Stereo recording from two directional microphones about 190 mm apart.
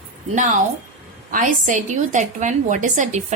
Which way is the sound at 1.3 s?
40° right (ahead or behind).